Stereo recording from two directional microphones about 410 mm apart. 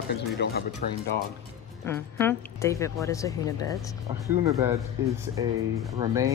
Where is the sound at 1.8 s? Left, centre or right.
Centre.